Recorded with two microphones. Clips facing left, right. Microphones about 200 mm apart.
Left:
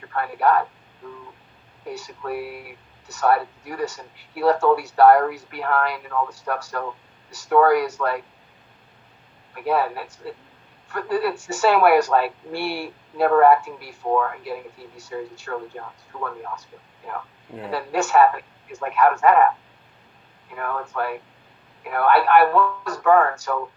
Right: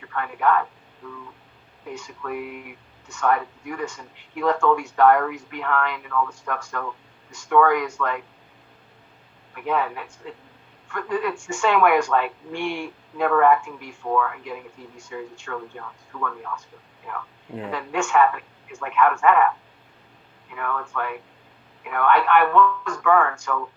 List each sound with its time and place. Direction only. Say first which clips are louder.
0.0 s speech: left 2 dB; 40° left (ahead or behind)
1.9 s speech: left 2 dB; 40° left (ahead or behind)
9.6 s speech: left 3 dB; 40° left (ahead or behind)